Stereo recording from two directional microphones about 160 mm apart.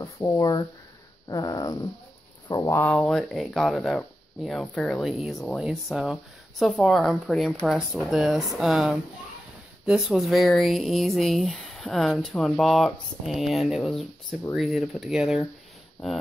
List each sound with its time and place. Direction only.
0.0 s speech: 25° left (ahead or behind)
3.0 s speech: 5° left (ahead or behind)